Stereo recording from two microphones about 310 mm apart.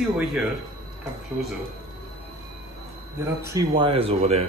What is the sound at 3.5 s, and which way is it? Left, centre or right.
Speech, centre.